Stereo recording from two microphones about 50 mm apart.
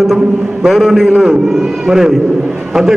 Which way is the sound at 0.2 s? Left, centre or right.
Centre.